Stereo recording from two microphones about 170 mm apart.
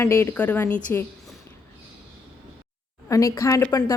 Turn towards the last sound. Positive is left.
turn(degrees=15)  # may be behind; listen again after turning